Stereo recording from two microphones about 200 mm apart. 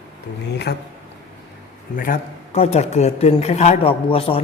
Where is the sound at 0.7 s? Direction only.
55° left (ahead or behind).